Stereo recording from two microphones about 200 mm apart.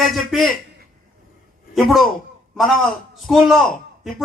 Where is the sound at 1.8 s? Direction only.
Centre (ahead or behind).